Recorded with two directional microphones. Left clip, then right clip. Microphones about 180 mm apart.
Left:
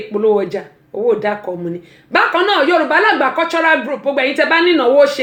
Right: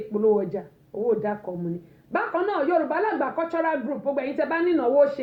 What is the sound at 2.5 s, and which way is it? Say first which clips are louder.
A woman's voice: left 9 dB; 35° left (ahead or behind).